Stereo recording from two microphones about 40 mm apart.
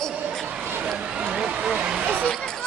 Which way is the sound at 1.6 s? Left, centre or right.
Right.